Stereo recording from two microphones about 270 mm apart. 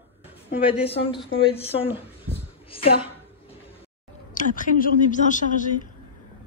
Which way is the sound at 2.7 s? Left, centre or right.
Centre.